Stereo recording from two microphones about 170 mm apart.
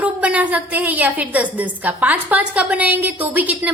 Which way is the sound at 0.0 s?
10° right (ahead or behind).